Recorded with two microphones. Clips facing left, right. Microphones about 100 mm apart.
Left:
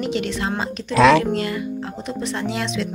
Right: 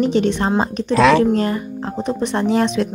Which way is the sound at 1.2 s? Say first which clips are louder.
Right 5 dB; 35° right (ahead or behind).